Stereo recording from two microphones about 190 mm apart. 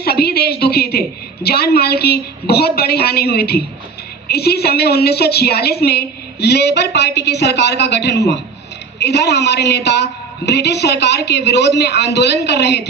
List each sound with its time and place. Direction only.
0.0 s a woman's voice: 55° left (ahead or behind)